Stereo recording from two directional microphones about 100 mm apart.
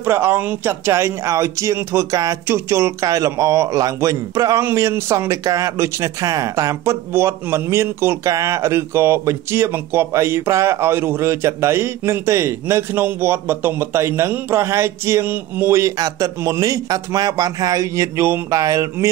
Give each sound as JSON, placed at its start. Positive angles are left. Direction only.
{"t": 0.0, "sound": "a man's voice", "side_deg": -20}
{"t": 16.0, "sound": "a man's voice", "side_deg": -35}